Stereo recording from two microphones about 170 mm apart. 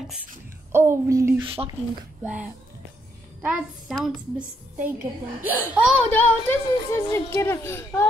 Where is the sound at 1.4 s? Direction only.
35° right (ahead or behind).